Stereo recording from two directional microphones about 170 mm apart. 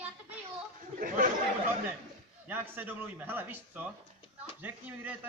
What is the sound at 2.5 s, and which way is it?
Speech, 10° right (ahead or behind).